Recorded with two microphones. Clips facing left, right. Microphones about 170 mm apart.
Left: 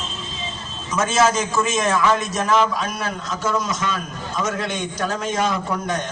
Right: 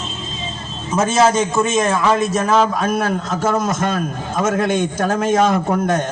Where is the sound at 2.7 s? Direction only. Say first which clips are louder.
Right 7 dB; 50° right (ahead or behind).